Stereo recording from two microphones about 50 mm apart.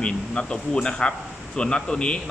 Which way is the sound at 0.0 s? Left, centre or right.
Centre.